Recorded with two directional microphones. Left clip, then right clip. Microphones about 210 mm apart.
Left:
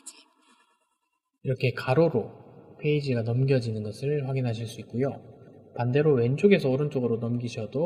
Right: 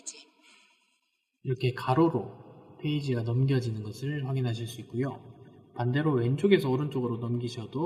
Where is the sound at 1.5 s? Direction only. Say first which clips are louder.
Left 2 dB; 30° left (ahead or behind).